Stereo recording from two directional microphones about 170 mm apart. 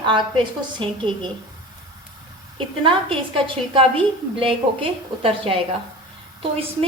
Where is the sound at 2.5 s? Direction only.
30° right (ahead or behind).